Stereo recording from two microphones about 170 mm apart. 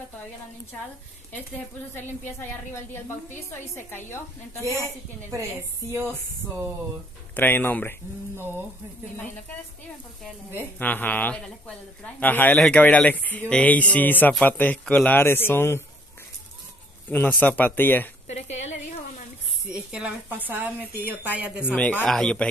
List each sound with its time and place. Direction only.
1.3 s a woman's voice: 10° left (ahead or behind)
5.9 s speech: 15° right (ahead or behind)
7.3 s a woman's voice: 10° left (ahead or behind)
10.6 s a woman's voice: 10° left (ahead or behind)
17.1 s a woman's voice: 10° left (ahead or behind)
18.2 s a woman's voice: 40° left (ahead or behind)
19.7 s speech: 5° right (ahead or behind)
21.6 s a woman's voice: 10° left (ahead or behind)